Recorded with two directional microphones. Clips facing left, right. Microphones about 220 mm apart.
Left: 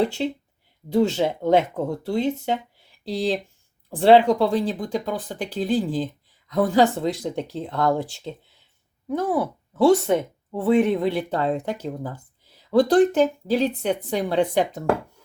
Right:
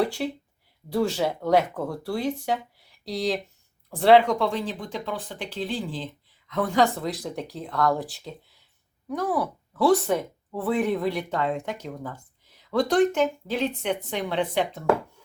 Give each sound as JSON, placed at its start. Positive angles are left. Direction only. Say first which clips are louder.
{"t": 0.0, "sound": "speech", "louder": "left 3 dB", "side_deg": 25}